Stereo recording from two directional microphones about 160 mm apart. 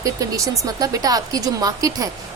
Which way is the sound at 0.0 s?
20° right (ahead or behind).